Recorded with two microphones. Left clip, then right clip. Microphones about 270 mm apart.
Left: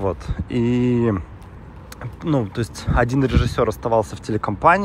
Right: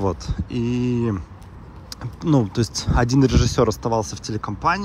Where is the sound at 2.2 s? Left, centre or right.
Right.